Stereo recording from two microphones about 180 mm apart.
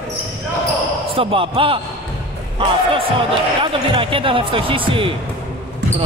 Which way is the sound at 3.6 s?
30° right (ahead or behind).